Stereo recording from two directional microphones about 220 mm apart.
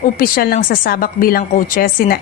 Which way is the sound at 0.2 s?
40° left (ahead or behind).